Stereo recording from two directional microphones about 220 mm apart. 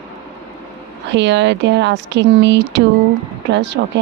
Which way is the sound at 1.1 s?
55° right (ahead or behind).